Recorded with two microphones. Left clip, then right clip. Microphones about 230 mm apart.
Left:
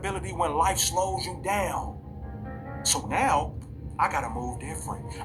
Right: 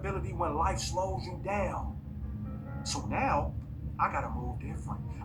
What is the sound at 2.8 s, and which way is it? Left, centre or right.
Speech, left.